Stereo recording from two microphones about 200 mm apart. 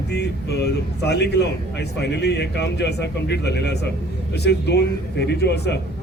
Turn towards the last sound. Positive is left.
turn(degrees=55)  # may be behind; listen again after turning